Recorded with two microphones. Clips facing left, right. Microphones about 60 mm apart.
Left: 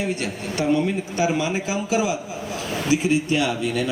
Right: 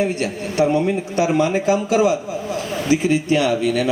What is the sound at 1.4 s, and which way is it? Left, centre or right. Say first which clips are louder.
Speech: right 7 dB; right.